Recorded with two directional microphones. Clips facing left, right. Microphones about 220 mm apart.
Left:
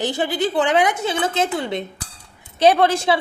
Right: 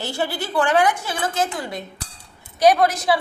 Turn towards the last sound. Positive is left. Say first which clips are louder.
# left 1 dB
turn(degrees=30)  # may be behind; listen again after turning